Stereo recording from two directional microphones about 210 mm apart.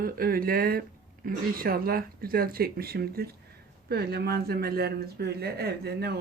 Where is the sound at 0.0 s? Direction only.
45° right (ahead or behind).